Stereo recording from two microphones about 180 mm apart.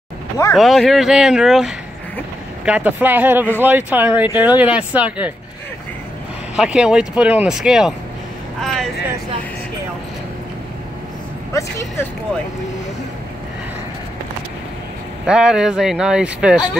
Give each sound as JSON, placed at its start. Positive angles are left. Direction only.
{"t": 0.6, "sound": "speech", "side_deg": 0}
{"t": 6.5, "sound": "speech", "side_deg": -5}
{"t": 11.5, "sound": "speech", "side_deg": 15}
{"t": 15.2, "sound": "speech", "side_deg": -5}